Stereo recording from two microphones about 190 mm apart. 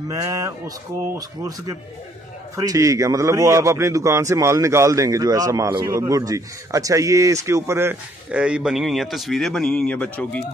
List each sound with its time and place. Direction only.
0.1 s a man's voice: 15° right (ahead or behind); by 10.4 s 5° left (ahead or behind)